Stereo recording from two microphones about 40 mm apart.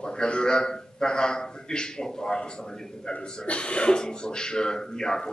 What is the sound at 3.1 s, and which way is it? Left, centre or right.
A man's voice, left.